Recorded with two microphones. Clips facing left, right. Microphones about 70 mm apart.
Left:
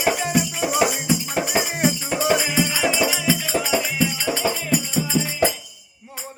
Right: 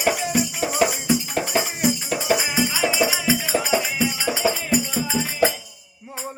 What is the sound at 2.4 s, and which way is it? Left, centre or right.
Music, centre.